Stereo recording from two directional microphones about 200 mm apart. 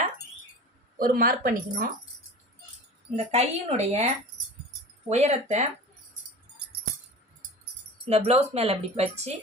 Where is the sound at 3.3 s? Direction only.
30° right (ahead or behind).